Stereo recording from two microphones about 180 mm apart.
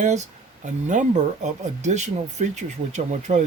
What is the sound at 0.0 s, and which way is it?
Speech, 40° right (ahead or behind).